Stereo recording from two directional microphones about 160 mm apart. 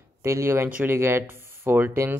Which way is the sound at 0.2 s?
15° right (ahead or behind).